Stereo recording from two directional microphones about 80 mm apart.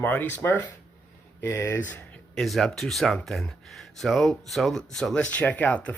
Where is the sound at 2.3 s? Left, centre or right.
Centre.